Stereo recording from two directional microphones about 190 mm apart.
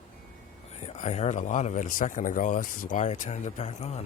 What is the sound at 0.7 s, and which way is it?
Speech, 35° left (ahead or behind).